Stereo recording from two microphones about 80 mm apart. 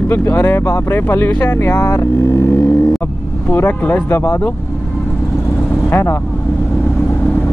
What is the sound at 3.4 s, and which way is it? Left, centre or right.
Speech, left.